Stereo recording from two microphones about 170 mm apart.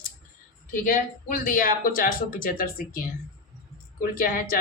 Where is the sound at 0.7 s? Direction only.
55° left (ahead or behind).